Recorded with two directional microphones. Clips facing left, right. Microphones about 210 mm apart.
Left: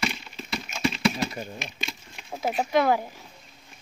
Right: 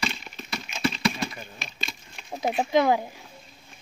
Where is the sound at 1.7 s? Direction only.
15° left (ahead or behind).